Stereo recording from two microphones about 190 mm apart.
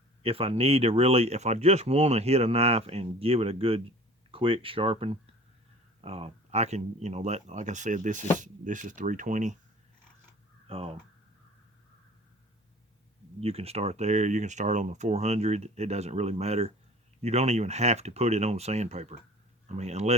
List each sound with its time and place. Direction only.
0.2 s speech: 30° right (ahead or behind)
10.7 s speech: 30° right (ahead or behind)
13.4 s speech: 30° right (ahead or behind)